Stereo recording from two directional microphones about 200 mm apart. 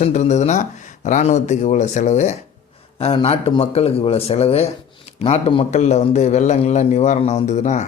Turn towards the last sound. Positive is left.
turn(degrees=35)  # may be behind; listen again after turning